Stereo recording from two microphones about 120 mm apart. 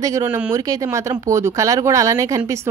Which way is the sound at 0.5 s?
30° right (ahead or behind).